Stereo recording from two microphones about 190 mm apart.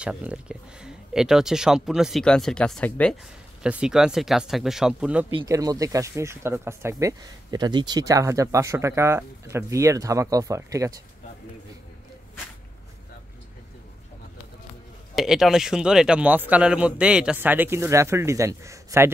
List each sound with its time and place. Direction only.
0.0 s speech: 5° right (ahead or behind)
5.5 s speech: 20° right (ahead or behind)
15.1 s speech: centre (ahead or behind)